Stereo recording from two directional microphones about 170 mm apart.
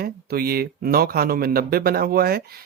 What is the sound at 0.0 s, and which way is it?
Speech, 65° right (ahead or behind).